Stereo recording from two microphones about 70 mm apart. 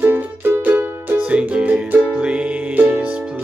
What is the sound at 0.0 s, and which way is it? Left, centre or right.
Music, right.